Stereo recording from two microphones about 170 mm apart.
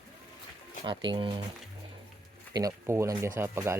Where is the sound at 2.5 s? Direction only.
20° right (ahead or behind).